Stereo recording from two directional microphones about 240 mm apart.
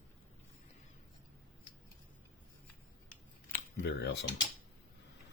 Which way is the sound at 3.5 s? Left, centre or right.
Left.